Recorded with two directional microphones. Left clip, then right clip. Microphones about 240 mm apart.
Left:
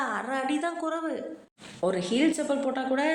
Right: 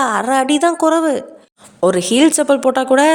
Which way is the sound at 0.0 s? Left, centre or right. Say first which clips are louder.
Right 14 dB; right.